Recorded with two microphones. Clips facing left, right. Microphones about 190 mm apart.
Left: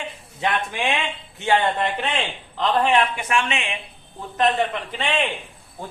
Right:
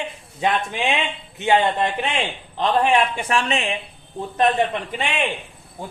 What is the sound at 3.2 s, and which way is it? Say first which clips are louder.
Speech: right 2 dB; 35° right (ahead or behind).